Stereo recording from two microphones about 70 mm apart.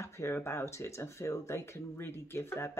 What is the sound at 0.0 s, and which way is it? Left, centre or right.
Speech, left.